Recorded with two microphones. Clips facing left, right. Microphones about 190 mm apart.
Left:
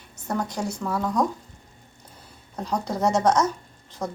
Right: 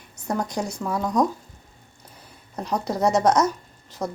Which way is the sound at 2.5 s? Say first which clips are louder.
Right 1 dB; 10° right (ahead or behind).